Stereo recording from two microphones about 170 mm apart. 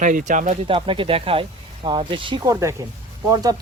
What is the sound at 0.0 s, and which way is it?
Speech, 50° right (ahead or behind).